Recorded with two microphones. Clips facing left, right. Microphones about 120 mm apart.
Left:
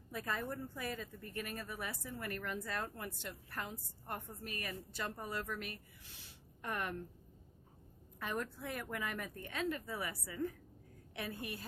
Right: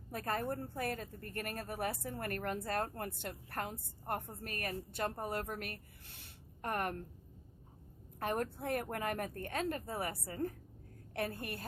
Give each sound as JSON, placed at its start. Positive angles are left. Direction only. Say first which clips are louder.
{"t": 0.1, "sound": "a woman's voice", "louder": "right 4 dB", "side_deg": -50}
{"t": 8.2, "sound": "a woman's voice", "louder": "right 4 dB", "side_deg": -50}